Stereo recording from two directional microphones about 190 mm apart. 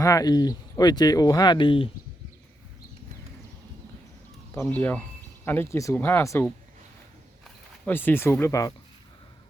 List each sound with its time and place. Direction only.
0.0 s speech: 20° left (ahead or behind)
4.6 s speech: 5° left (ahead or behind)
7.4 s speech: 10° left (ahead or behind)